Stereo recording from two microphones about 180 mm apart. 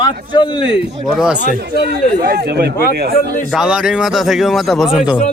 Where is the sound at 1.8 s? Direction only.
65° right (ahead or behind).